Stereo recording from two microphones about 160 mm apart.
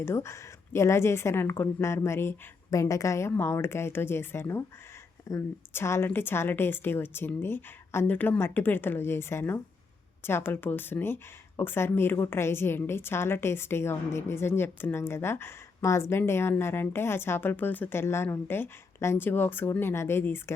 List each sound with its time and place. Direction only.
0.0 s speech: 15° left (ahead or behind)